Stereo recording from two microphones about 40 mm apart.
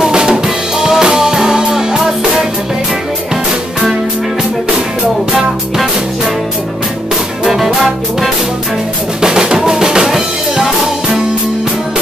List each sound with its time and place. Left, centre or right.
0.0 s music: centre
7.4 s music: centre
9.2 s drum: centre